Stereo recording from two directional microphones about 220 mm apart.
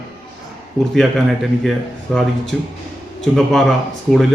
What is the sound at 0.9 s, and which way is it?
Speech, centre (ahead or behind).